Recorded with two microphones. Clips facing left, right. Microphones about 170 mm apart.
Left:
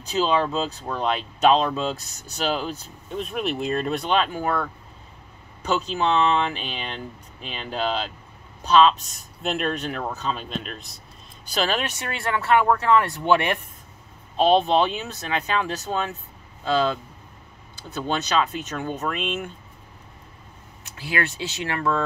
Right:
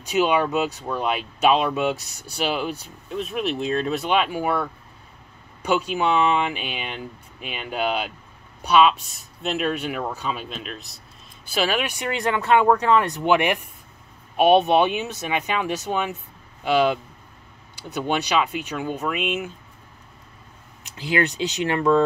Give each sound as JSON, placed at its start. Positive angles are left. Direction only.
{"t": 0.1, "sound": "speech", "side_deg": -15}
{"t": 20.8, "sound": "speech", "side_deg": -20}